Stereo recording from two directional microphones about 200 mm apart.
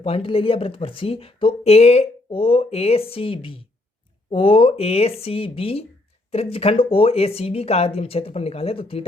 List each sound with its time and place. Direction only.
0.0 s speech: 25° left (ahead or behind)